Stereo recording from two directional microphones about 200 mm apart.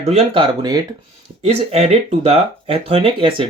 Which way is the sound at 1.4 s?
30° right (ahead or behind).